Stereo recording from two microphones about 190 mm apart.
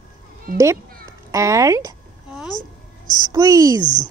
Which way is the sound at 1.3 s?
15° right (ahead or behind).